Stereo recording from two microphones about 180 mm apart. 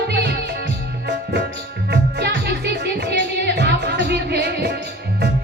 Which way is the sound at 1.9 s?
70° right (ahead or behind).